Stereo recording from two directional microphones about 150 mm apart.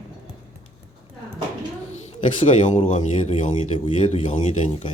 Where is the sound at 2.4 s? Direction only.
50° left (ahead or behind).